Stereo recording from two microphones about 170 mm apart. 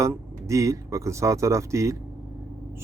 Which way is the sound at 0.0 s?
20° right (ahead or behind).